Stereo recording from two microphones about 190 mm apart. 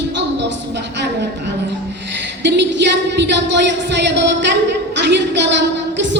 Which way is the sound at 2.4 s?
65° right (ahead or behind).